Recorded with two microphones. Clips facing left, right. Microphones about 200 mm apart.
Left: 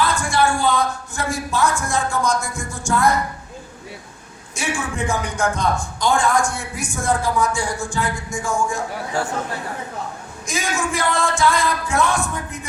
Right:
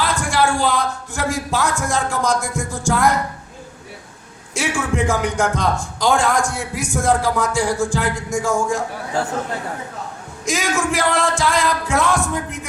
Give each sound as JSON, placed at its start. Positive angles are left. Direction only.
{"t": 0.1, "sound": "speech", "side_deg": -90}
{"t": 4.5, "sound": "a man's voice", "side_deg": -90}
{"t": 10.4, "sound": "a man's voice", "side_deg": -90}